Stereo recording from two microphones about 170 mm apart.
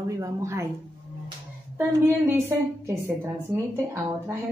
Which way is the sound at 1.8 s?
15° right (ahead or behind).